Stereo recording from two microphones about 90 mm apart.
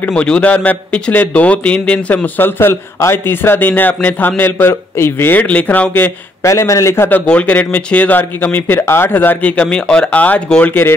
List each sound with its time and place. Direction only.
0.1 s a man's voice: 10° left (ahead or behind)
6.4 s a man's voice: 35° left (ahead or behind)
7.1 s a man's voice: 15° left (ahead or behind)